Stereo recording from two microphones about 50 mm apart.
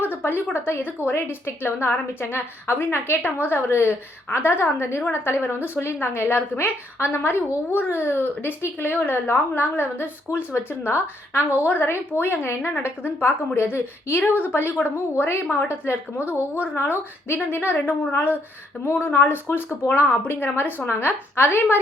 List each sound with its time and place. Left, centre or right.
0.0 s a sound: left
0.5 s a woman's voice: left
10.5 s a woman's voice: left
14.9 s a woman's voice: left